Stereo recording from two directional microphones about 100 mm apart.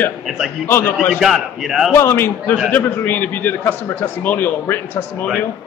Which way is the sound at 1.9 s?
25° left (ahead or behind).